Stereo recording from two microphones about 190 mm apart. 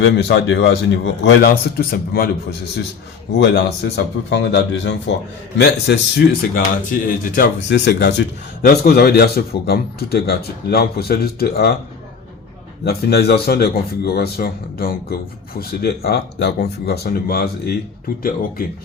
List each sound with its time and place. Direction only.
0.0 s a man's voice: 65° left (ahead or behind)
3.3 s a man's voice: 65° left (ahead or behind)
6.5 s speech: 45° left (ahead or behind)
7.7 s speech: 65° left (ahead or behind)
8.6 s a man's voice: 55° left (ahead or behind)
12.8 s a man's voice: 55° left (ahead or behind)